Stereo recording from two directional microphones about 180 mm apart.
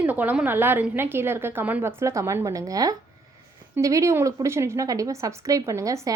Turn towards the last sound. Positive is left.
turn(degrees=-20)  # may be behind; listen again after turning